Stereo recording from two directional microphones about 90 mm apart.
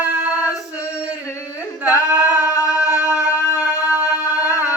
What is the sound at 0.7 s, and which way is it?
Male singing, 30° left (ahead or behind).